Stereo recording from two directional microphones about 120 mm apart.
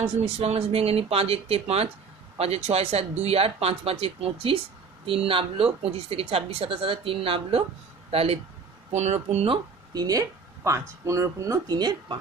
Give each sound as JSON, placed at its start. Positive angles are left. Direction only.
{"t": 0.0, "sound": "a woman's voice", "side_deg": -60}
{"t": 8.9, "sound": "speech", "side_deg": -70}
{"t": 9.9, "sound": "speech", "side_deg": -30}